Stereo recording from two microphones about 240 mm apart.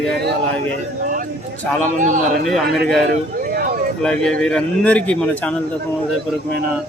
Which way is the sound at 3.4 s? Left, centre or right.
Right.